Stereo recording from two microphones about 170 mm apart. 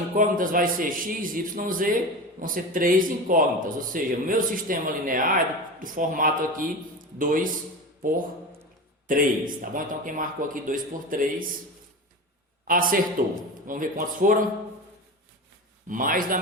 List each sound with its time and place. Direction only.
0.2 s a man's voice: 55° right (ahead or behind)
9.0 s a man's voice: 55° right (ahead or behind)
12.6 s a man's voice: 55° right (ahead or behind)
15.9 s a man's voice: 55° right (ahead or behind)